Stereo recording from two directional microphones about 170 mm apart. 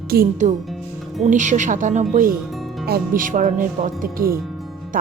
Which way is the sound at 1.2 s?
45° right (ahead or behind).